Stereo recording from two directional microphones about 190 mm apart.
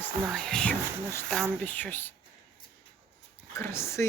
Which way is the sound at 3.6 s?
15° left (ahead or behind).